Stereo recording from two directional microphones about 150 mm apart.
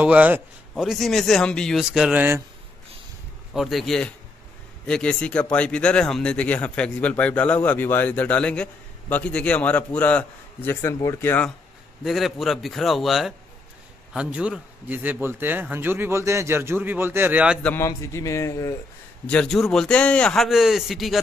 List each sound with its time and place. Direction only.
0.0 s a man's voice: 10° right (ahead or behind)
3.5 s a man's voice: centre (ahead or behind)
12.0 s a man's voice: centre (ahead or behind)
17.6 s a man's voice: 20° left (ahead or behind)
19.2 s a man's voice: 5° left (ahead or behind)